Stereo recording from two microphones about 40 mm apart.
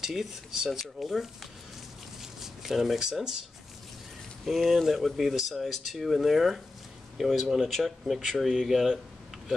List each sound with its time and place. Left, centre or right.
0.0 s speech: centre
2.4 s a sound: centre
4.5 s speech: centre